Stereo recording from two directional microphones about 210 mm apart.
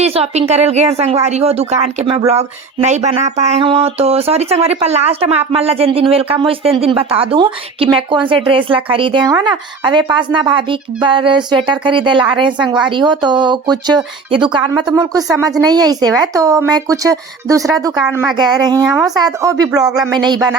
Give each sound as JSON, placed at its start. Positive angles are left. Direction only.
{"t": 0.0, "sound": "a woman's voice", "side_deg": -30}
{"t": 19.8, "sound": "speech", "side_deg": -5}
{"t": 20.1, "sound": "speech", "side_deg": -20}